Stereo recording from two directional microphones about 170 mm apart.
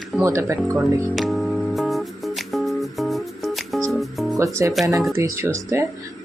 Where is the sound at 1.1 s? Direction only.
Centre (ahead or behind).